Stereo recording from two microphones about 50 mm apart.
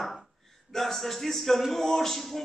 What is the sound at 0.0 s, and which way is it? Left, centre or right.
A man's voice, centre.